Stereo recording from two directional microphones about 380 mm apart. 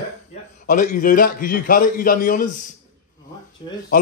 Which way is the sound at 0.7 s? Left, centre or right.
Left.